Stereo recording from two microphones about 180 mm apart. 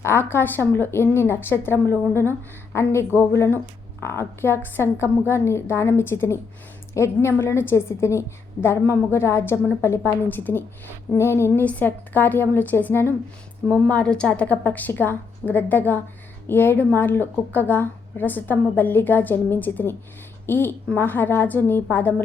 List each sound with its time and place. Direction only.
0.0 s a woman's voice: 15° left (ahead or behind)